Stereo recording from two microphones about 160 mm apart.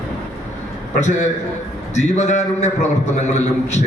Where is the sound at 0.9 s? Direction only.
45° left (ahead or behind).